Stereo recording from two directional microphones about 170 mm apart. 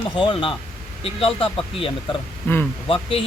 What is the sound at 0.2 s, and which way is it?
Speech, 30° left (ahead or behind).